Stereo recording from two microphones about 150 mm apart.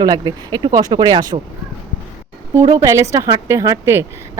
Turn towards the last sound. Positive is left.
turn(degrees=-20)  # may be behind; listen again after turning